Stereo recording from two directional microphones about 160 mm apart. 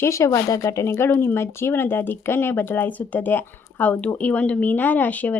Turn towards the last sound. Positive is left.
turn(degrees=10)  # may be behind; listen again after turning